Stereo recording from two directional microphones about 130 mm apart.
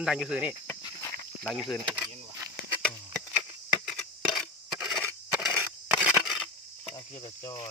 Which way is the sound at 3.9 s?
5° left (ahead or behind).